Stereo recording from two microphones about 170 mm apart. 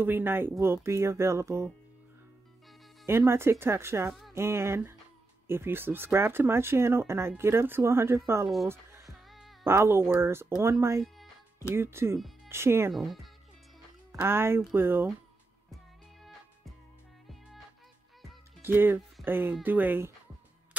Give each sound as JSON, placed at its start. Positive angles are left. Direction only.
{"t": 0.0, "sound": "speech", "side_deg": -10}
{"t": 3.1, "sound": "speech", "side_deg": -15}
{"t": 9.0, "sound": "music", "side_deg": 0}
{"t": 9.7, "sound": "speech", "side_deg": -15}
{"t": 12.9, "sound": "speech", "side_deg": 0}
{"t": 14.2, "sound": "speech", "side_deg": -15}
{"t": 15.7, "sound": "music", "side_deg": 0}
{"t": 18.6, "sound": "speech", "side_deg": -10}